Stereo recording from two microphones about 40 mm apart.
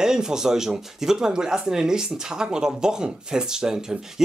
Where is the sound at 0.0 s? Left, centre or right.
Centre.